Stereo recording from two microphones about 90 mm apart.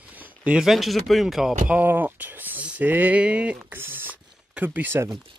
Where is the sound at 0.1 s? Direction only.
15° right (ahead or behind).